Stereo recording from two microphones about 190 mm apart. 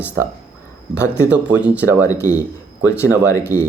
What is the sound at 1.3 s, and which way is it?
Speech, 5° right (ahead or behind).